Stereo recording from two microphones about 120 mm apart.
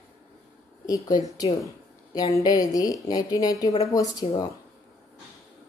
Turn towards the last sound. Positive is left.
turn(degrees=30)  # may be behind; listen again after turning